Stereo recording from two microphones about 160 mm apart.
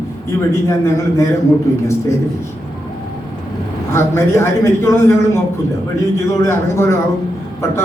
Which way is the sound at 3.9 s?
15° left (ahead or behind).